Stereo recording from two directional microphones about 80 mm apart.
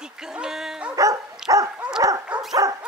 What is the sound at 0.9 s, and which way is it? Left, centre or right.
Dog, right.